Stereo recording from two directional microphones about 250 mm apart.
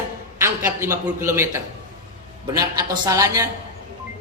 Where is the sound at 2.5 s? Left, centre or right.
Centre.